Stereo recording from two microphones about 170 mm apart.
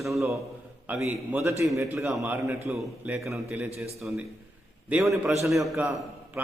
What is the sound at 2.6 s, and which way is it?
A man's voice, centre (ahead or behind).